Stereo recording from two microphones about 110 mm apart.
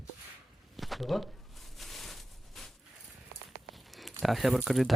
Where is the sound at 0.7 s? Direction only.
Centre (ahead or behind).